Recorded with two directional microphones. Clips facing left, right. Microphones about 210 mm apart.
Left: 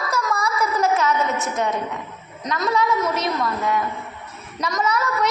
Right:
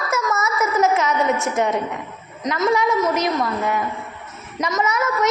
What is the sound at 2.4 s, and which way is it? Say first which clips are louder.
Speech: right 3 dB; 20° right (ahead or behind).